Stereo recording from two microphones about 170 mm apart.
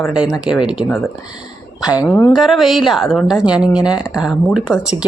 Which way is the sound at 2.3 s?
Centre (ahead or behind).